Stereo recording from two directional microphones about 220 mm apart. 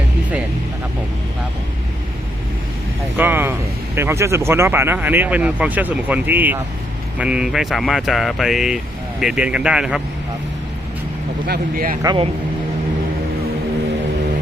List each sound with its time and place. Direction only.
3.2 s a sound: 10° right (ahead or behind)
3.9 s speech: 10° right (ahead or behind)
11.4 s speech: 45° right (ahead or behind)
12.0 s speech: 25° right (ahead or behind)